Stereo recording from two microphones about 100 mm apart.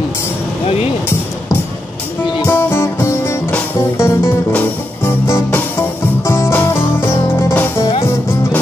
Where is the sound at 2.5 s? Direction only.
25° left (ahead or behind).